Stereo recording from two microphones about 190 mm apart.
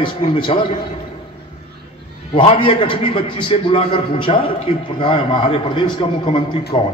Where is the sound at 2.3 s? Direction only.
25° left (ahead or behind).